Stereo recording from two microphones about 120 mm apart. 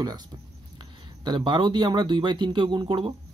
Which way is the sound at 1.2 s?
40° right (ahead or behind).